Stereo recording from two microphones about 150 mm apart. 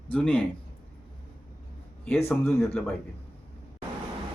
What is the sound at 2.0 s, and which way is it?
Speech, 10° left (ahead or behind).